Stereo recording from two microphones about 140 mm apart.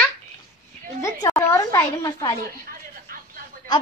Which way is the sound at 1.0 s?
25° left (ahead or behind).